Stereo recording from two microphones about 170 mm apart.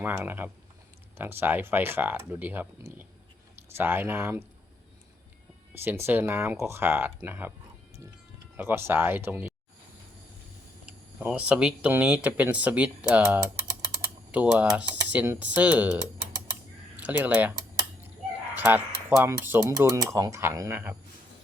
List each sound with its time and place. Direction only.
0.0 s speech: 10° right (ahead or behind)
5.7 s speech: 15° right (ahead or behind)
8.5 s speech: 15° right (ahead or behind)
11.2 s speech: 5° right (ahead or behind)
14.3 s speech: 10° right (ahead or behind)
17.0 s speech: 10° right (ahead or behind)
18.5 s speech: 10° right (ahead or behind)